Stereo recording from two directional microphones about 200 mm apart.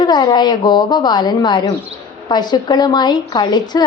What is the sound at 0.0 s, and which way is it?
A woman's voice, 20° left (ahead or behind).